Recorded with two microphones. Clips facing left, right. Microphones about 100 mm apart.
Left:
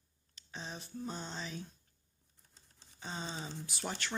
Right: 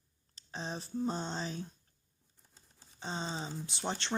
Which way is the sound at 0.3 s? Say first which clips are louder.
Right 5 dB; 35° right (ahead or behind).